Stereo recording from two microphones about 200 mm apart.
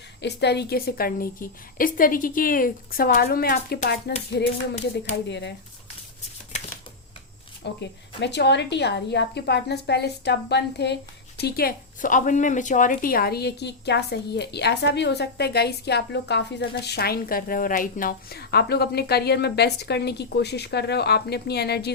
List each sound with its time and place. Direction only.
0.2 s speech: 55° left (ahead or behind)
5.3 s a woman's voice: 60° left (ahead or behind)
7.6 s a woman's voice: 60° left (ahead or behind)